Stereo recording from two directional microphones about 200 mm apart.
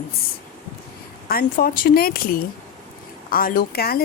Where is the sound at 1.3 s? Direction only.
45° left (ahead or behind).